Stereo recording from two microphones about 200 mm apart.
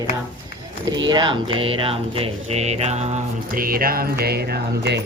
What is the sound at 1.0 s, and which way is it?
Mantra, 20° right (ahead or behind).